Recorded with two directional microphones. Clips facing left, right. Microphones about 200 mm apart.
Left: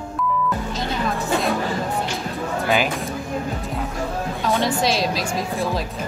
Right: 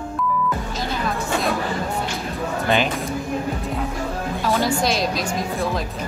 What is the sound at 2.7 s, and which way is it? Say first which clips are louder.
Speech: right 1 dB; 5° left (ahead or behind).